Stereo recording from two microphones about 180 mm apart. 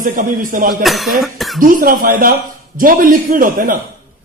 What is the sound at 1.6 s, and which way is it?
A man's voice, 50° right (ahead or behind).